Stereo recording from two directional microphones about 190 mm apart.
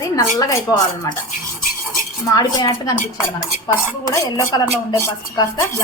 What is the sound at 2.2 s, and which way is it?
A woman's voice, 20° left (ahead or behind).